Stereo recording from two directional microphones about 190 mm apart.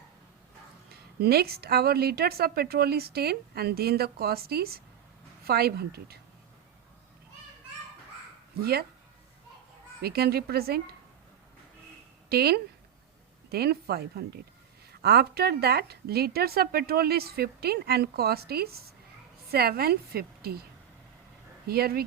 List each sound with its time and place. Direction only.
1.2 s speech: 55° right (ahead or behind)
10.0 s speech: 55° right (ahead or behind)
12.3 s a woman's voice: 55° right (ahead or behind)
21.7 s a woman's voice: 55° right (ahead or behind)